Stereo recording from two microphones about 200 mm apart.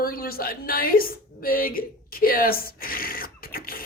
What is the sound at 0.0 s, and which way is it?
A woman's voice, 45° left (ahead or behind).